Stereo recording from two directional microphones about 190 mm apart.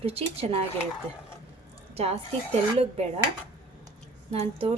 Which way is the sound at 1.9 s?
35° right (ahead or behind).